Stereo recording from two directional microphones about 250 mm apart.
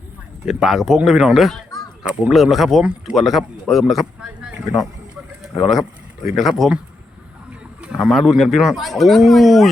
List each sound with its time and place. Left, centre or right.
0.4 s a man's voice: centre
5.5 s a man's voice: centre
7.8 s a man's voice: centre